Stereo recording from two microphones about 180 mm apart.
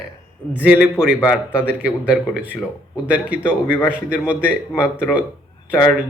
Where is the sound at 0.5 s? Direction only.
10° right (ahead or behind).